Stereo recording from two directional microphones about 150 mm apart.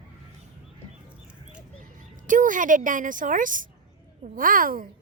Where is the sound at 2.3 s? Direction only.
60° right (ahead or behind).